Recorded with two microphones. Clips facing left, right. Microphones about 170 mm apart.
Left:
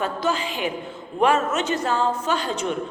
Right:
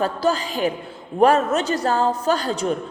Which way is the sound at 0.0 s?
35° right (ahead or behind).